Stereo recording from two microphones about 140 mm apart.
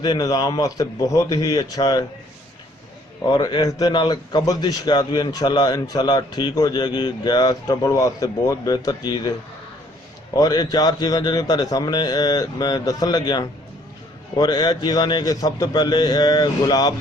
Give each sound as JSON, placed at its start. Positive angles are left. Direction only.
{"t": 0.0, "sound": "a man's voice", "side_deg": 30}
{"t": 3.2, "sound": "a man's voice", "side_deg": 35}
{"t": 10.3, "sound": "a man's voice", "side_deg": 25}